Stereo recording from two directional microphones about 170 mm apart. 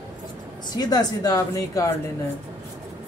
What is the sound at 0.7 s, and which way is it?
A woman's voice, 25° left (ahead or behind).